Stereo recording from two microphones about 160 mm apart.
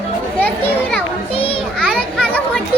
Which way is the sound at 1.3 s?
35° left (ahead or behind).